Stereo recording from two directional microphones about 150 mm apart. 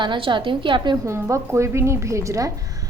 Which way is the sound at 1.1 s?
20° right (ahead or behind).